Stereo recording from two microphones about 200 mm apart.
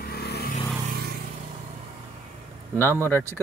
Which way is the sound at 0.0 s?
50° left (ahead or behind).